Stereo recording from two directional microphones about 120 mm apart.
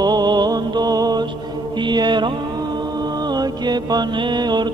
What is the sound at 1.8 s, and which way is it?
Mantra, 40° right (ahead or behind).